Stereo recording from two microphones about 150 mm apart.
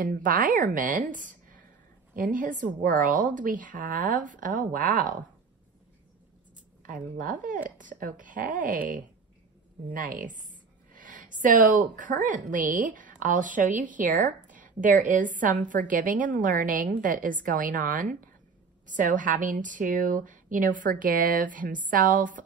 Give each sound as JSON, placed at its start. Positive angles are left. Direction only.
{"t": 0.0, "sound": "a woman's voice", "side_deg": -65}
{"t": 6.8, "sound": "a woman's voice", "side_deg": -65}